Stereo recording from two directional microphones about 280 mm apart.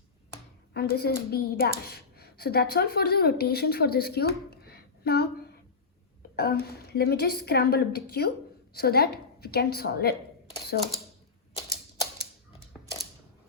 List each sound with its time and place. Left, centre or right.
0.7 s a woman's voice: left
6.3 s a woman's voice: left
12.8 s typewriter: centre